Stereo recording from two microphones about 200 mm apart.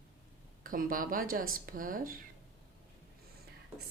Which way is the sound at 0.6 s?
45° right (ahead or behind).